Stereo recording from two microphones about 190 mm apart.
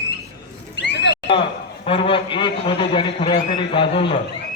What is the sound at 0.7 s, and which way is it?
Horse, 65° left (ahead or behind).